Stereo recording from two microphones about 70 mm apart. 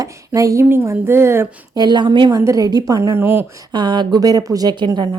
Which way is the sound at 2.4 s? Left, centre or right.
Right.